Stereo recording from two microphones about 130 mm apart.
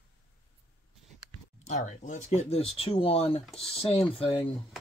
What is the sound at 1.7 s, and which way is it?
Speech, 70° left (ahead or behind).